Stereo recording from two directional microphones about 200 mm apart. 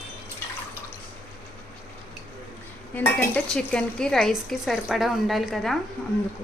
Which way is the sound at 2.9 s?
10° left (ahead or behind).